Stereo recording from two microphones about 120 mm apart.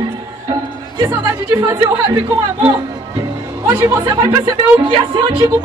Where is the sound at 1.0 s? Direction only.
25° right (ahead or behind).